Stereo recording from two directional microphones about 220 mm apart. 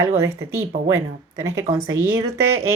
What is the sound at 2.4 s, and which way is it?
Speech, 70° right (ahead or behind).